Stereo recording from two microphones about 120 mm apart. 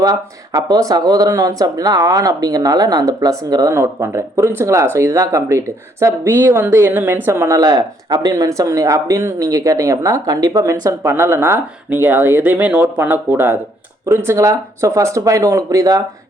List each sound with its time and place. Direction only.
0.0 s speech: 30° right (ahead or behind)